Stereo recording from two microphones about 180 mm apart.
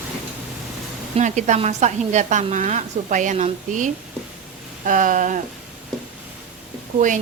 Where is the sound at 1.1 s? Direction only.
40° right (ahead or behind).